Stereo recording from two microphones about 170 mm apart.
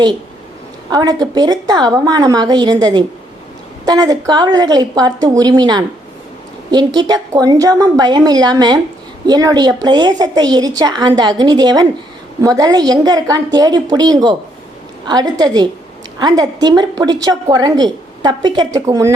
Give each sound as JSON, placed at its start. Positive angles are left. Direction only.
{"t": 0.9, "sound": "a woman's voice", "side_deg": -25}